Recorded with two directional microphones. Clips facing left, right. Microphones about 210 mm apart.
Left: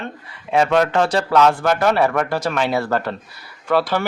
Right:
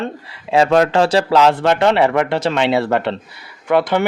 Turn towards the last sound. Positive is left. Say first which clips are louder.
# right 3 dB
turn(degrees=-20)  # may be behind; listen again after turning